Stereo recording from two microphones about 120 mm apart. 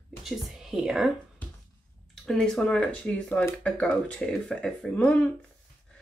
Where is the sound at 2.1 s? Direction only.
5° left (ahead or behind).